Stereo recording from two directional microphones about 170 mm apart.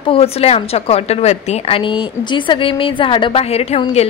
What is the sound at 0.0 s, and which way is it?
A woman's voice, 35° left (ahead or behind).